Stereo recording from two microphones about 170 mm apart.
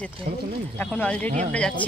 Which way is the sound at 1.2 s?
40° right (ahead or behind).